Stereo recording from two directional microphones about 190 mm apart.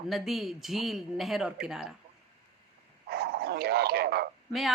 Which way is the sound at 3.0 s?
55° right (ahead or behind).